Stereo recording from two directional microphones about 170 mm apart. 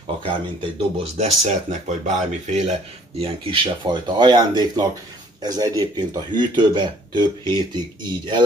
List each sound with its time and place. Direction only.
0.2 s speech: 35° right (ahead or behind)
3.2 s speech: 30° right (ahead or behind)